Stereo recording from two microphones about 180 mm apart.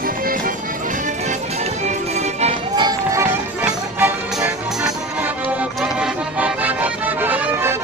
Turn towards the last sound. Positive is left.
turn(degrees=-10)  # may be behind; listen again after turning